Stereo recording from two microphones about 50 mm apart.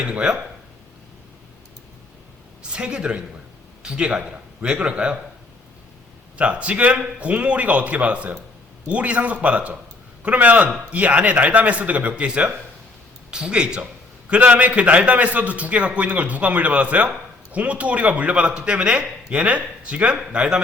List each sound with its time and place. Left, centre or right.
0.0 s a man's voice: right
2.6 s a man's voice: centre
6.3 s a man's voice: right
14.3 s a man's voice: right